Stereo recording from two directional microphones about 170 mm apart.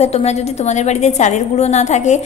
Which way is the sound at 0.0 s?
40° left (ahead or behind).